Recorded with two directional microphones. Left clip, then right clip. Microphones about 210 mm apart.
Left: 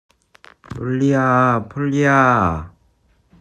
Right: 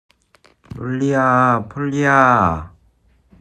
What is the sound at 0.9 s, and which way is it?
Speech, 5° left (ahead or behind).